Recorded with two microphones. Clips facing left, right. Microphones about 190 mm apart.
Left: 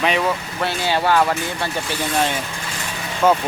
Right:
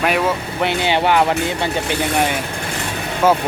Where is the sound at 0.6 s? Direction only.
20° right (ahead or behind).